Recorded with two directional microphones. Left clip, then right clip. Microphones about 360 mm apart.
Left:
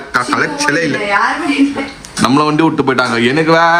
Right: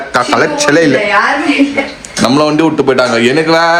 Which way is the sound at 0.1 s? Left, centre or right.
Centre.